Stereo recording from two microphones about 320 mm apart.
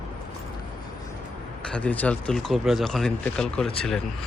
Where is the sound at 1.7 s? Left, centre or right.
Centre.